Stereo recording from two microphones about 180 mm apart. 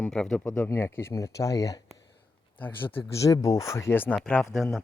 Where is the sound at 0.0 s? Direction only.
5° left (ahead or behind).